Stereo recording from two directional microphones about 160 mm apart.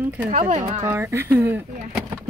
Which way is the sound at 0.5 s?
50° right (ahead or behind).